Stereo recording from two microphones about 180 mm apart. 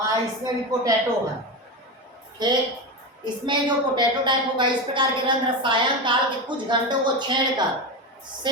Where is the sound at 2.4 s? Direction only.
25° right (ahead or behind).